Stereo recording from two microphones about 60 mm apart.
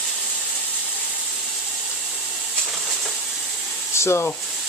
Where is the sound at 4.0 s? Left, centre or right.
Left.